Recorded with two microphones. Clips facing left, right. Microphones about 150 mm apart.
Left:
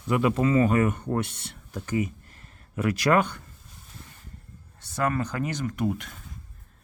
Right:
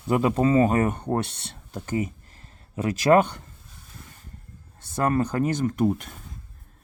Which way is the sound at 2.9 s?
40° right (ahead or behind).